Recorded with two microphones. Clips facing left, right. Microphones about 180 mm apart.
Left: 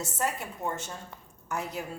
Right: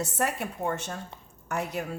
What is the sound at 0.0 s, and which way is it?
A woman's voice, 65° right (ahead or behind).